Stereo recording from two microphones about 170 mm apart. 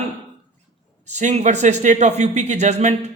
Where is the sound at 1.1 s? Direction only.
45° right (ahead or behind).